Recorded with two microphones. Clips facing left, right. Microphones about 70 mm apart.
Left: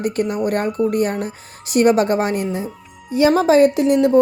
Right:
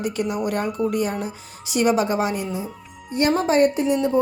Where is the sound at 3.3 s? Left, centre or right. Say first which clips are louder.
Left 4 dB; left.